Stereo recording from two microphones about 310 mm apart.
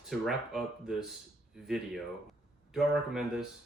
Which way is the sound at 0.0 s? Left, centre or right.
Centre.